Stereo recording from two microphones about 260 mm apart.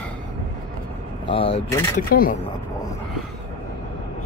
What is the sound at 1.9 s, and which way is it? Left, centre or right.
Speech, left.